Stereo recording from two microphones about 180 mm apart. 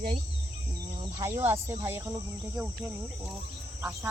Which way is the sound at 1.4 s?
10° right (ahead or behind).